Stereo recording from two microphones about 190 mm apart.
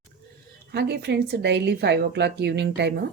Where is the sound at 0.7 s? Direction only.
60° right (ahead or behind).